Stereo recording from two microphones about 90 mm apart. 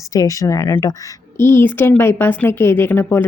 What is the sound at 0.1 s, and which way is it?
Speech, 40° left (ahead or behind).